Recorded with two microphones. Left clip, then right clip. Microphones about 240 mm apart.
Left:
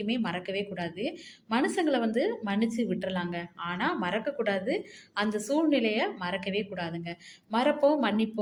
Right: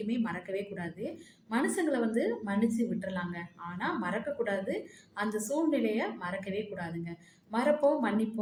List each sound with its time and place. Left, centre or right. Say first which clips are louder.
0.2 s a woman's voice: left 3 dB; left